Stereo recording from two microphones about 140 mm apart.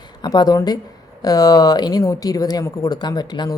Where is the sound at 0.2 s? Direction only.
30° left (ahead or behind).